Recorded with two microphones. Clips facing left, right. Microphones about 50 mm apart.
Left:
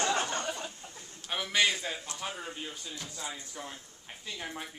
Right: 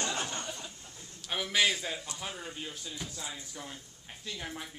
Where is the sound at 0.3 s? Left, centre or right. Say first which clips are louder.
Left 5 dB; left.